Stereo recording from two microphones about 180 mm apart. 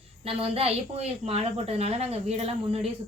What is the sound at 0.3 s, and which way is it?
A woman's voice, 30° right (ahead or behind).